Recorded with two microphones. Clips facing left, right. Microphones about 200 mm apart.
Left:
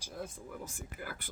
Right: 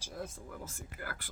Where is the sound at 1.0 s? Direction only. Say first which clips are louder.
Even; 15° left (ahead or behind).